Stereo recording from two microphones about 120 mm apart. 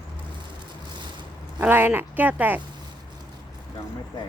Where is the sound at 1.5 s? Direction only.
15° right (ahead or behind).